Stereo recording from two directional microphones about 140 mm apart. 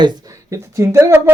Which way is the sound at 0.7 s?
20° right (ahead or behind).